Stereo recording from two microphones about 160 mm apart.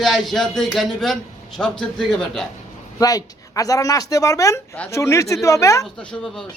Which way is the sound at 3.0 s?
25° left (ahead or behind).